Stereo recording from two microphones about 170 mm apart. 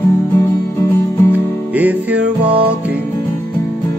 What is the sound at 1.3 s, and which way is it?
Music, 10° right (ahead or behind).